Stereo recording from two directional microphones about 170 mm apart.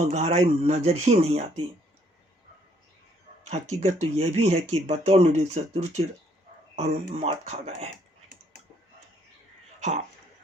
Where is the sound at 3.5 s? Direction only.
40° right (ahead or behind).